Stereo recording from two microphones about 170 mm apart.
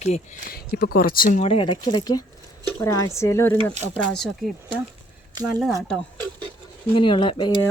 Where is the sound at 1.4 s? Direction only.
30° left (ahead or behind); by 3.6 s 15° left (ahead or behind).